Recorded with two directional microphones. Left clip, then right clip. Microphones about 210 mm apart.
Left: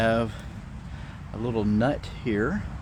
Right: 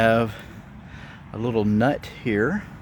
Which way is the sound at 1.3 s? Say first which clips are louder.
Right 4 dB; 45° right (ahead or behind).